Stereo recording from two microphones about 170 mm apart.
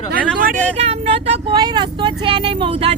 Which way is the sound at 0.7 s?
40° right (ahead or behind).